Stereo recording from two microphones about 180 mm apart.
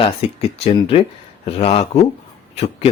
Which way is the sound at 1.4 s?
35° left (ahead or behind).